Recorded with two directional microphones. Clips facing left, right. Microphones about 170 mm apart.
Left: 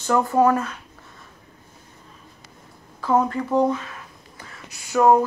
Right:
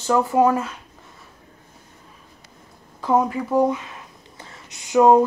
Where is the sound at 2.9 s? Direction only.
15° right (ahead or behind).